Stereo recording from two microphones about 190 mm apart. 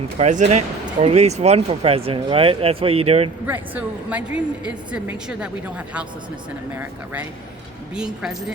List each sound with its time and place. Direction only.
0.2 s speech: 40° right (ahead or behind)
3.4 s a woman's voice: 10° right (ahead or behind)